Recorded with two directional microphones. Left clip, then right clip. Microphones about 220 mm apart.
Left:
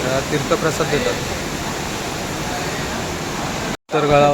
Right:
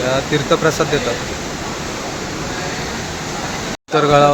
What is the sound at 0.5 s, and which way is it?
Speech, 15° right (ahead or behind).